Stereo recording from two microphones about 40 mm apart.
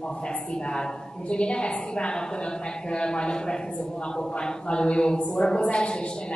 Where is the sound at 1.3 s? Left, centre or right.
Left.